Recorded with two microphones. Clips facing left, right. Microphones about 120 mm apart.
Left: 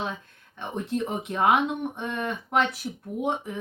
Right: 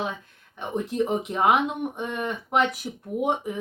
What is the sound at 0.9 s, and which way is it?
Speech, 10° right (ahead or behind).